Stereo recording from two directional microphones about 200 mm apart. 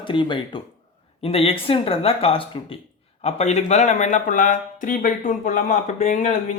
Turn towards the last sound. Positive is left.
turn(degrees=40)  # may be behind; listen again after turning